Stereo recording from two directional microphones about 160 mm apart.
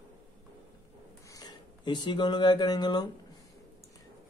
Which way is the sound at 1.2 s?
25° left (ahead or behind).